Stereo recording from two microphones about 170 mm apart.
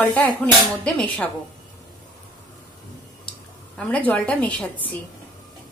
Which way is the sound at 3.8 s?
10° left (ahead or behind).